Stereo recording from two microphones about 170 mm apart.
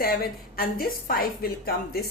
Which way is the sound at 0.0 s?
60° left (ahead or behind).